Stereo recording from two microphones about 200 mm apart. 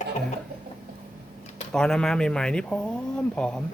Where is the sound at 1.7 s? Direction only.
5° left (ahead or behind).